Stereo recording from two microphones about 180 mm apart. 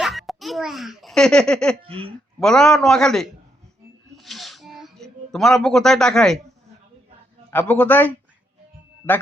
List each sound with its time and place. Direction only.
0.0 s a child's voice: centre (ahead or behind)
4.2 s a sound: centre (ahead or behind)
7.5 s a man's voice: 10° left (ahead or behind)